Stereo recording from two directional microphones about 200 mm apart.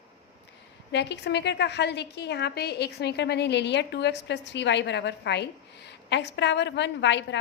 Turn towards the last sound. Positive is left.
turn(degrees=60)  # may be behind; listen again after turning